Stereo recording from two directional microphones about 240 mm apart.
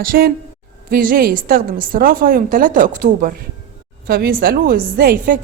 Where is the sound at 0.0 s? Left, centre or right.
Right.